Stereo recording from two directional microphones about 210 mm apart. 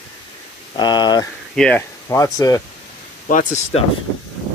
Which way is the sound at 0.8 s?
20° left (ahead or behind).